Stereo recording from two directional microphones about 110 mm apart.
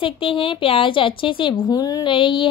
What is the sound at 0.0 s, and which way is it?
A woman's voice, 55° left (ahead or behind).